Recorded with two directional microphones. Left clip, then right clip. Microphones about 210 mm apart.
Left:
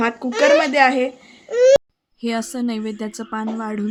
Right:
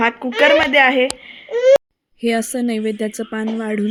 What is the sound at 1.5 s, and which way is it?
Baby cry, 40° left (ahead or behind).